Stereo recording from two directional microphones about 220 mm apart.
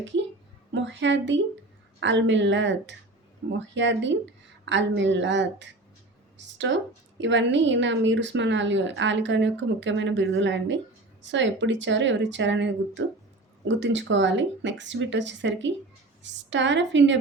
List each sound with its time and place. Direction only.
0.7 s a woman's voice: 55° right (ahead or behind)